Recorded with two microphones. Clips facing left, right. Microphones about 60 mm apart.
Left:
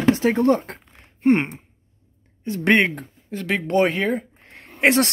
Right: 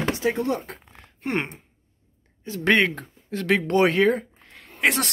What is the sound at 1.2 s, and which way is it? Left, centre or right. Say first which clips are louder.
Speech: left 9 dB; left.